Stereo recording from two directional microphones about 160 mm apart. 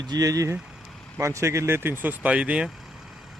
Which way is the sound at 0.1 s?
20° right (ahead or behind).